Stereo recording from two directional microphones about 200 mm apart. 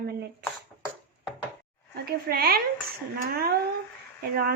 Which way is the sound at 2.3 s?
50° right (ahead or behind).